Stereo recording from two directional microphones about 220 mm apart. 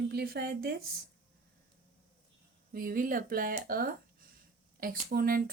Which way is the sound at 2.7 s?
40° right (ahead or behind).